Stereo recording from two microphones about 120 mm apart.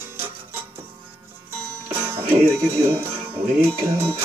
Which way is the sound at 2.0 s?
20° right (ahead or behind).